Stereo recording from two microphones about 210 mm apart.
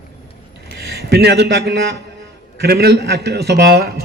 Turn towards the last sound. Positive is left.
turn(degrees=-50)  # may be behind; listen again after turning